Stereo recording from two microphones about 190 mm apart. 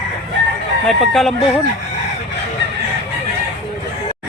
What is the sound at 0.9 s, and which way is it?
Speech, centre (ahead or behind).